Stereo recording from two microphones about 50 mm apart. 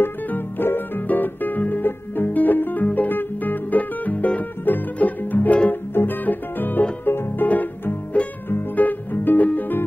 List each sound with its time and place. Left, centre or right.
0.3 s music: left
8.7 s music: left